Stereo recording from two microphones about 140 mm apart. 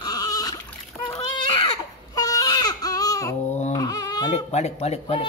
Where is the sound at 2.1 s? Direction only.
25° left (ahead or behind).